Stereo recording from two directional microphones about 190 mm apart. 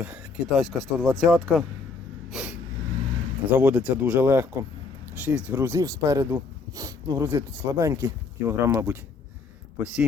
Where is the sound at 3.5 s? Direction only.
10° right (ahead or behind).